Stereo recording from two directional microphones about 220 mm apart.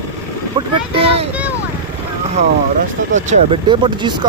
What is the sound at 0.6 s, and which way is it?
Speech, 25° right (ahead or behind).